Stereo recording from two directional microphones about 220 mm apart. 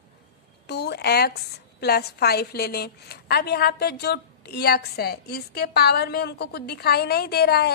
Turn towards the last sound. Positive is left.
turn(degrees=45)  # may be behind; listen again after turning